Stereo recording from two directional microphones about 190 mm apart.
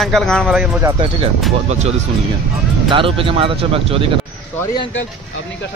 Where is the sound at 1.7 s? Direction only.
35° right (ahead or behind).